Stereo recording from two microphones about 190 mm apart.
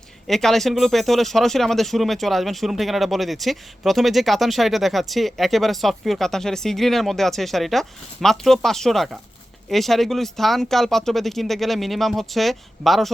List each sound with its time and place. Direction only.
0.3 s speech: centre (ahead or behind)